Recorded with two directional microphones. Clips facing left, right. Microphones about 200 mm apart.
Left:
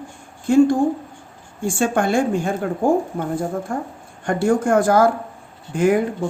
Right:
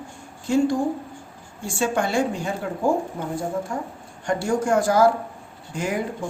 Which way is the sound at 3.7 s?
55° left (ahead or behind).